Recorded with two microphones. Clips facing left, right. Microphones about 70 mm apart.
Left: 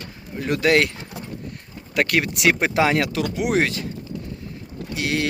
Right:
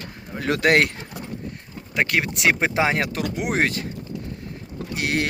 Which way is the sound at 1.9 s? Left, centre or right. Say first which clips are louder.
Left 2 dB; right.